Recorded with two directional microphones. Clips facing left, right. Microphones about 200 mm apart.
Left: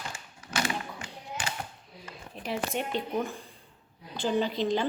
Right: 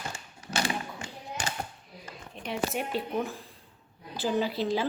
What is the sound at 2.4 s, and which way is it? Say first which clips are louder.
A woman's voice: even; centre (ahead or behind).